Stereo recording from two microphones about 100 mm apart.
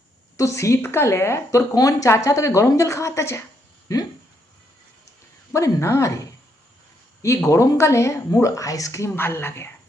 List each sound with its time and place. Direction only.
0.3 s speech: 30° left (ahead or behind)
5.5 s speech: 30° left (ahead or behind)
7.2 s speech: 30° left (ahead or behind)